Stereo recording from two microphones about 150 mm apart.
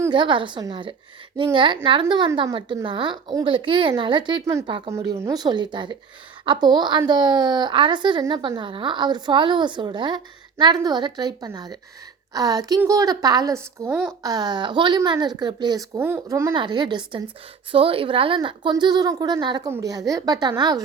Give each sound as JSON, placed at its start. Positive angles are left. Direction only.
{"t": 0.1, "sound": "a woman's voice", "side_deg": -30}
{"t": 4.9, "sound": "a woman's voice", "side_deg": -20}
{"t": 13.8, "sound": "speech", "side_deg": -10}
{"t": 14.2, "sound": "speech", "side_deg": -25}
{"t": 16.6, "sound": "a woman's voice", "side_deg": -30}